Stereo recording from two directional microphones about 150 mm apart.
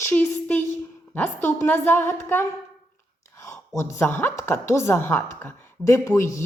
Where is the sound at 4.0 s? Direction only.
15° left (ahead or behind).